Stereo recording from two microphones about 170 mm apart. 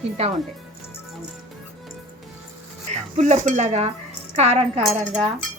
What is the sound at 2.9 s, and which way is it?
Dishes, 45° right (ahead or behind).